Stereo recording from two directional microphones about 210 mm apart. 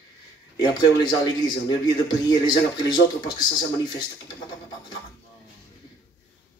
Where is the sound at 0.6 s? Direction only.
20° left (ahead or behind).